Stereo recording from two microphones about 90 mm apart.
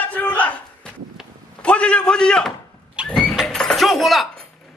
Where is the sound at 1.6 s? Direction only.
10° left (ahead or behind).